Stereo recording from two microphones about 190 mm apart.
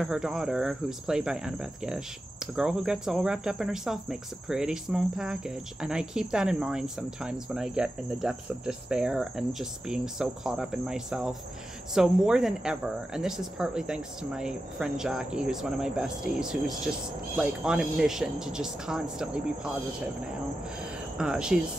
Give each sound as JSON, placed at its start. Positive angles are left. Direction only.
{"t": 0.0, "sound": "speech", "side_deg": 0}
{"t": 21.2, "sound": "speech", "side_deg": -5}